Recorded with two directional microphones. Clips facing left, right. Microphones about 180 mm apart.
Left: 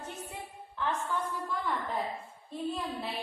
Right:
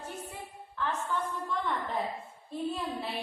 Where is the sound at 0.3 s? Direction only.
15° left (ahead or behind).